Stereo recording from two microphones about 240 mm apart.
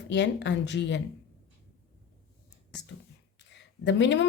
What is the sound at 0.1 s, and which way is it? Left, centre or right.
Speech, left.